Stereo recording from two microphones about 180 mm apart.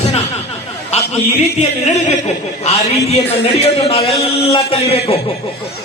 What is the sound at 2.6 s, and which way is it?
A man's voice, 35° left (ahead or behind).